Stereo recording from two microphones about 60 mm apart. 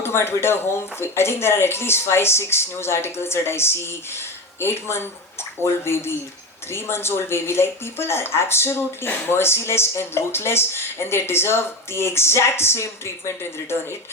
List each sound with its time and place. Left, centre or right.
0.0 s speech: left